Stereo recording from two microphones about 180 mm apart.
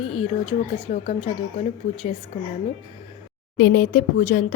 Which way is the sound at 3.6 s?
55° left (ahead or behind).